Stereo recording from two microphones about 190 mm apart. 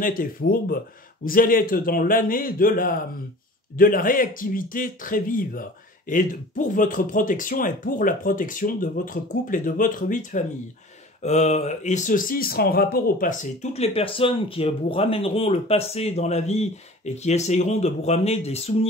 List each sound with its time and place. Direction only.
0.0 s speech: 50° left (ahead or behind); by 18.9 s 30° left (ahead or behind)